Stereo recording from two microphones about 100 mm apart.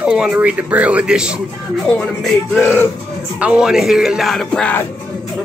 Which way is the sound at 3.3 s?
10° right (ahead or behind).